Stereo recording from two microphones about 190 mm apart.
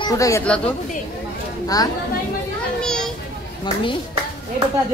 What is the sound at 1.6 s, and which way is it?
Speech, 20° left (ahead or behind).